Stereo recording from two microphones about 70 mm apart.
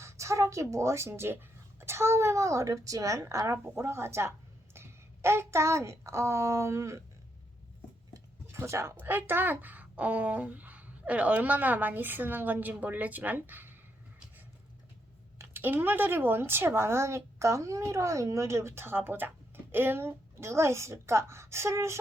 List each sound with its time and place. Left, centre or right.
0.0 s speech: right
8.1 s a sound: right
9.0 s speech: right
15.5 s speech: right